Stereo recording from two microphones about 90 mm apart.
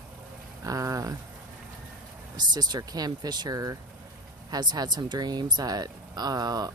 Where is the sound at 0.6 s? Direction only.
40° right (ahead or behind).